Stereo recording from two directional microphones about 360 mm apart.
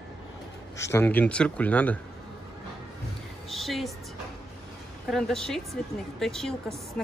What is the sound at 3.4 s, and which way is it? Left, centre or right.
Music, centre.